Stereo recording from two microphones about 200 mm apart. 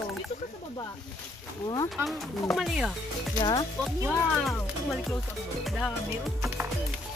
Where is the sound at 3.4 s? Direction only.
20° left (ahead or behind).